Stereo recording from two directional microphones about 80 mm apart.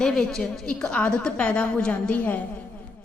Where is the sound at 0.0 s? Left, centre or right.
Centre.